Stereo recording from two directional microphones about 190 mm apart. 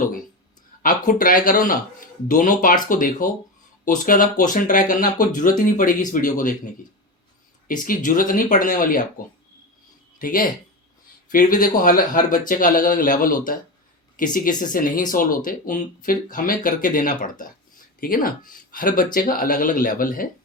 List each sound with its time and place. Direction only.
0.8 s speech: 45° left (ahead or behind)
7.7 s speech: 45° left (ahead or behind)